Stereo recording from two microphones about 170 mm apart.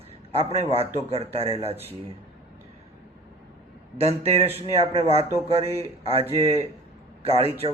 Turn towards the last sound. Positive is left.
turn(degrees=-35)  # may be behind; listen again after turning